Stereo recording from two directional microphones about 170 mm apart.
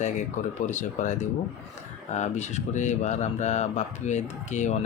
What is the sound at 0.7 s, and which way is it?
Speech, 45° left (ahead or behind).